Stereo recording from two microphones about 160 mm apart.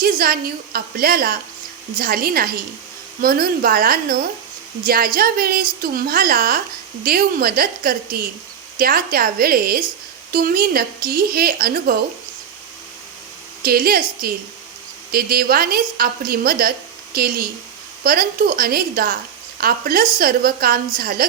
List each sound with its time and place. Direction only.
0.0 s a woman's voice: 65° right (ahead or behind)
13.6 s a woman's voice: 70° right (ahead or behind)